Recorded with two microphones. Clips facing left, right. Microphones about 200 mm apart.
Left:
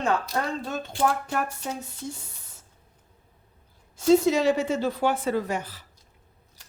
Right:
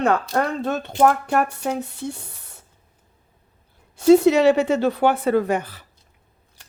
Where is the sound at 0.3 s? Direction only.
65° right (ahead or behind).